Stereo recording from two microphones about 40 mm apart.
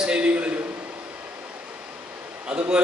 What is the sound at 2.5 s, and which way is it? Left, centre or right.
Speech, centre.